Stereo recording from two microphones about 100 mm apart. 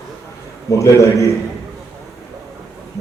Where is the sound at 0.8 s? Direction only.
30° left (ahead or behind).